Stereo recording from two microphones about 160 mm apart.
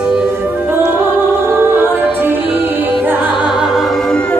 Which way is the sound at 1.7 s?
15° right (ahead or behind).